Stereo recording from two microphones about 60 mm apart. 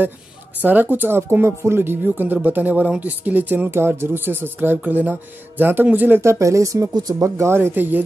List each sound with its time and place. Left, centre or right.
0.6 s speech: right
6.2 s speech: right
7.5 s speech: right